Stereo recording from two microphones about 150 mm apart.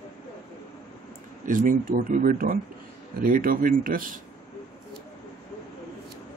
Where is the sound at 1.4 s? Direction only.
60° right (ahead or behind).